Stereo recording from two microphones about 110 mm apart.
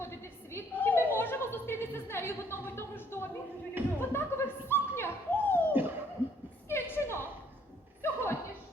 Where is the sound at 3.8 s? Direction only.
20° right (ahead or behind).